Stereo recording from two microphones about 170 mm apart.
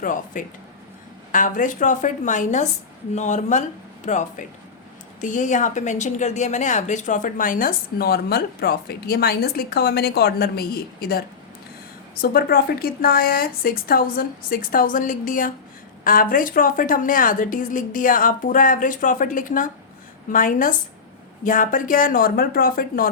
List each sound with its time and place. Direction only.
0.0 s a woman's voice: 50° left (ahead or behind)